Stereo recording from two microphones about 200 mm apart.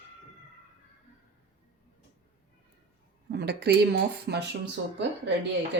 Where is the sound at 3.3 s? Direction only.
55° right (ahead or behind).